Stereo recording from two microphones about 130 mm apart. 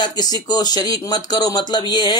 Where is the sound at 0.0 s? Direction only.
35° left (ahead or behind).